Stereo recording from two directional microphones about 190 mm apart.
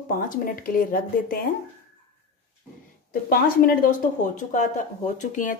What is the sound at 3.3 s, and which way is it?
Speech, 45° left (ahead or behind).